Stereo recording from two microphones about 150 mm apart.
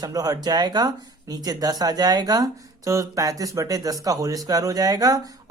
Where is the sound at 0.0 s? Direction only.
25° right (ahead or behind).